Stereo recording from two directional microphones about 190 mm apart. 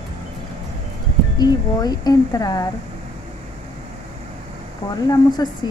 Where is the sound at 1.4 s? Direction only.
20° left (ahead or behind).